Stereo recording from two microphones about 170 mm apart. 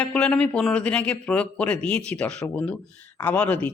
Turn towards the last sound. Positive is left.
turn(degrees=10)  # may be behind; listen again after turning